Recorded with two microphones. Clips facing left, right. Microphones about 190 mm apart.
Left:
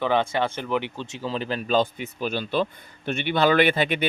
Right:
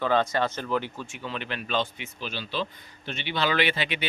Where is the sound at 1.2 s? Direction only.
35° left (ahead or behind).